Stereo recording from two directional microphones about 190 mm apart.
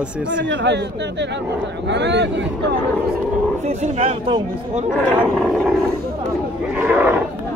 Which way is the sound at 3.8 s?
30° right (ahead or behind).